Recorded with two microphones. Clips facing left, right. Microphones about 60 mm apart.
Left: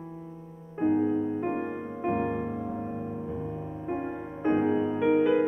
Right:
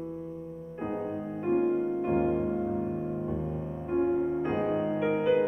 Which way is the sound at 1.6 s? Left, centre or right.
Centre.